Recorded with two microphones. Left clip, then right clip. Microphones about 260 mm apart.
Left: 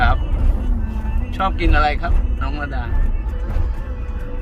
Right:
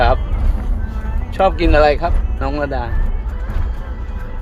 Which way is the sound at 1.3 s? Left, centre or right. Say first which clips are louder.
Right 6 dB; centre.